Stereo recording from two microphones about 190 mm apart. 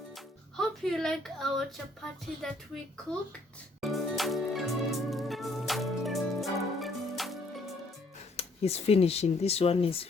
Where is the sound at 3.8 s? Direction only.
Centre (ahead or behind).